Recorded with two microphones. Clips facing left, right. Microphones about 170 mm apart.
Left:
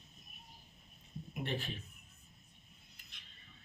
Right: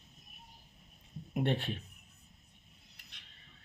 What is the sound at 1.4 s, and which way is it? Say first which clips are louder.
Speech: right 6 dB; 65° right (ahead or behind).